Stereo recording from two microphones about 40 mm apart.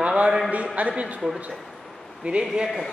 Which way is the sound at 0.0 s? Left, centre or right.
Right.